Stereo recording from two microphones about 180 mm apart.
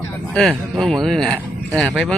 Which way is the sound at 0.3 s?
Centre (ahead or behind).